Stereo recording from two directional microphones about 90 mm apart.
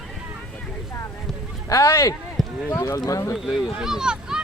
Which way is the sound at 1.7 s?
35° left (ahead or behind).